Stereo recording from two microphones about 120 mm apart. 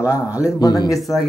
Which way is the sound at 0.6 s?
35° left (ahead or behind).